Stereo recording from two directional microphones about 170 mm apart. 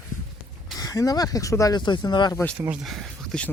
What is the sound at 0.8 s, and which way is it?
Speech, 20° left (ahead or behind).